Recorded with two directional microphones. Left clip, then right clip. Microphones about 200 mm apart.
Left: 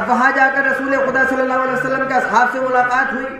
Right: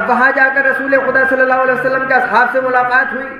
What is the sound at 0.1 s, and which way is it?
A man's voice, 15° left (ahead or behind).